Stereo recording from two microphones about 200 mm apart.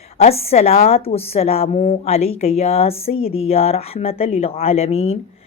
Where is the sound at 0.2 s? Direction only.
30° left (ahead or behind).